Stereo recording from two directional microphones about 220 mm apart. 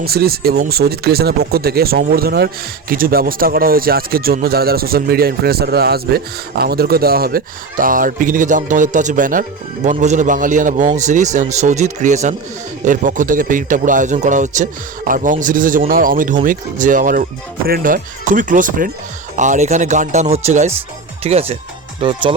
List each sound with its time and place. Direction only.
0.0 s speech: 45° right (ahead or behind); by 22.4 s 25° right (ahead or behind)